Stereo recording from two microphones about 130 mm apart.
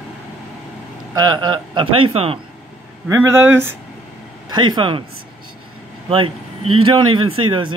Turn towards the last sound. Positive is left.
turn(degrees=-40)  # may be behind; listen again after turning